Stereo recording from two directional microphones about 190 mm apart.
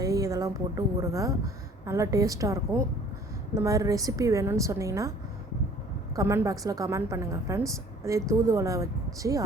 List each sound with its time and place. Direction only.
0.0 s a woman's voice: 15° right (ahead or behind)
6.1 s a woman's voice: 15° right (ahead or behind)